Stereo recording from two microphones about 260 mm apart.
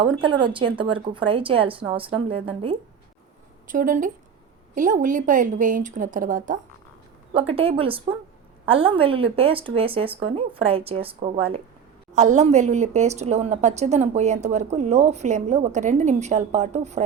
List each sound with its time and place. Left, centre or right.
0.0 s a woman's voice: centre